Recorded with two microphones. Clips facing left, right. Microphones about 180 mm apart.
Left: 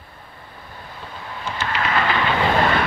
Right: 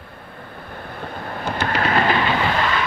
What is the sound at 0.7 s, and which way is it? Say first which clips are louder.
Vehicle: right 5 dB; 55° right (ahead or behind).